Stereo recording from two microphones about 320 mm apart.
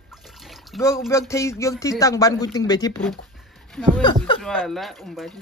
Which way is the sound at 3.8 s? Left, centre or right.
Centre.